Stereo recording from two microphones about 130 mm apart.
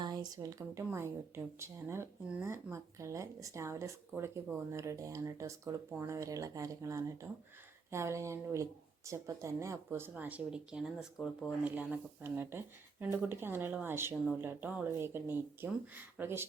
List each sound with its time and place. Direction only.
0.0 s speech: 30° right (ahead or behind)